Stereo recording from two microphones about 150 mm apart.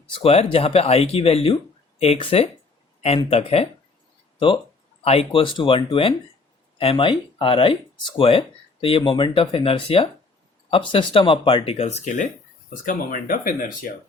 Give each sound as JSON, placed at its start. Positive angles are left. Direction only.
{"t": 0.0, "sound": "speech", "side_deg": 35}